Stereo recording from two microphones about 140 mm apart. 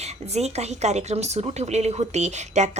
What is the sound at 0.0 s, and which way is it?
Speech, 50° right (ahead or behind).